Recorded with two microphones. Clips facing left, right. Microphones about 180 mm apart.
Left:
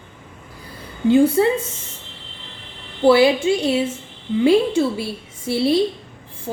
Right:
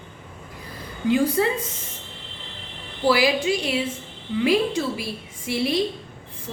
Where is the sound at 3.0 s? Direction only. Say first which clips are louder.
Left 6 dB; 25° left (ahead or behind).